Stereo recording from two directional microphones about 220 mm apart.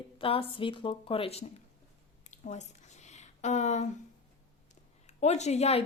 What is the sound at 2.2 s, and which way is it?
Squish, 35° left (ahead or behind).